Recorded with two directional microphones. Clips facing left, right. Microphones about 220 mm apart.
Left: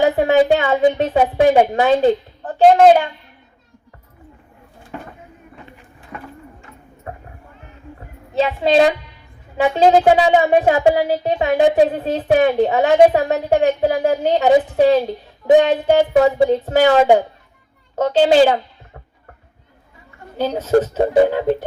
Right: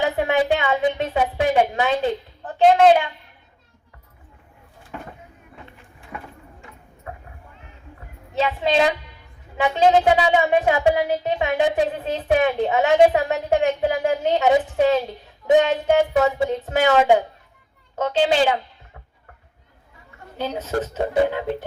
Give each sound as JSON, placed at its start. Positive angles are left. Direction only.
{"t": 0.2, "sound": "a woman's voice", "side_deg": 40}
{"t": 6.1, "sound": "a sound", "side_deg": -10}
{"t": 7.1, "sound": "a sound", "side_deg": 40}
{"t": 7.9, "sound": "music", "side_deg": 35}
{"t": 9.6, "sound": "a woman's voice", "side_deg": 40}
{"t": 20.4, "sound": "a woman's voice", "side_deg": 35}